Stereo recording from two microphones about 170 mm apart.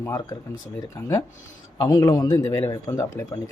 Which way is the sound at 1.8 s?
20° left (ahead or behind).